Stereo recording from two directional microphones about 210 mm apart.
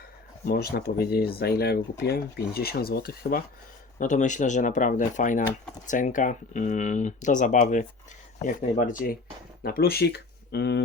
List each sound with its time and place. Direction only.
0.4 s speech: 45° left (ahead or behind)